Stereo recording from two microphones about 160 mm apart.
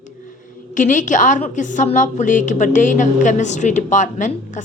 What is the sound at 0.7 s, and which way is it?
A woman's voice, 55° left (ahead or behind).